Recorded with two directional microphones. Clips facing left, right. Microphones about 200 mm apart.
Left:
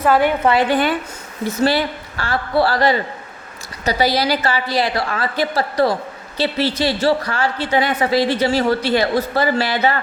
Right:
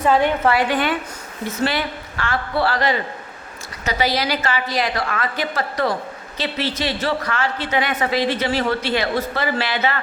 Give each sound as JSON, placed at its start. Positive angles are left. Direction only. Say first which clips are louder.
{"t": 0.0, "sound": "a woman's voice", "louder": "left 2 dB", "side_deg": 5}
{"t": 0.7, "sound": "a woman's voice", "louder": "left 3 dB", "side_deg": 35}